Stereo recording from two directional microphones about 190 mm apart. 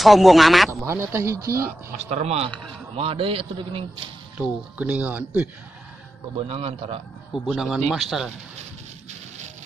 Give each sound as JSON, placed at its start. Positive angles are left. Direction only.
{"t": 0.0, "sound": "speech", "side_deg": 0}
{"t": 0.8, "sound": "speech", "side_deg": -15}
{"t": 2.0, "sound": "a man's voice", "side_deg": -35}
{"t": 4.4, "sound": "speech", "side_deg": -10}
{"t": 6.4, "sound": "a man's voice", "side_deg": -30}
{"t": 7.4, "sound": "speech", "side_deg": 0}